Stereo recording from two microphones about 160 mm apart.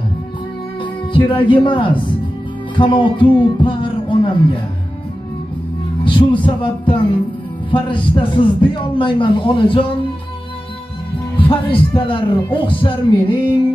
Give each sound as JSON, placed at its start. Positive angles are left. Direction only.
{"t": 1.1, "sound": "a man's voice", "side_deg": 30}
{"t": 6.0, "sound": "a man's voice", "side_deg": 30}
{"t": 11.3, "sound": "a man's voice", "side_deg": 35}